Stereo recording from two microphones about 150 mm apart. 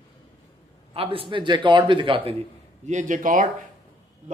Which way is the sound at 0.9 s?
35° right (ahead or behind).